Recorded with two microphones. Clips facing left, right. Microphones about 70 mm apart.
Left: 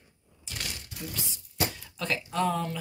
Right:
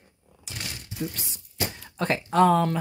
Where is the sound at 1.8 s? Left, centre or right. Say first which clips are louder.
Right 6 dB; right.